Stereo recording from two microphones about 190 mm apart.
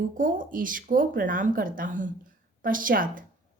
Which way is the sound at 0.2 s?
45° right (ahead or behind).